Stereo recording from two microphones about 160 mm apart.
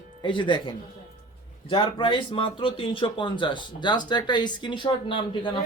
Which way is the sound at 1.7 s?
35° left (ahead or behind).